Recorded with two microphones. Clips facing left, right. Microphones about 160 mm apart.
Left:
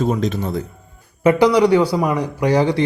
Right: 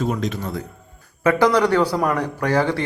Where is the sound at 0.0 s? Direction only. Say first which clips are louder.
Left 4 dB; 30° left (ahead or behind).